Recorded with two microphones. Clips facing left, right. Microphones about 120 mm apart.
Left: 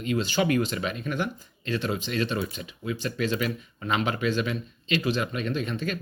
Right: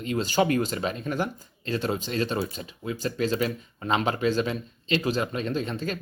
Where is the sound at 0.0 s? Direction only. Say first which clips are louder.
Right 1 dB; 40° right (ahead or behind).